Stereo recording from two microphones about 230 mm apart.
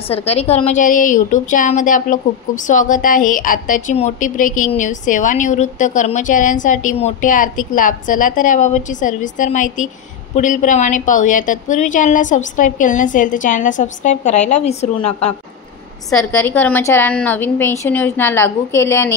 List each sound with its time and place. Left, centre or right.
0.1 s a woman's voice: left
16.1 s a woman's voice: centre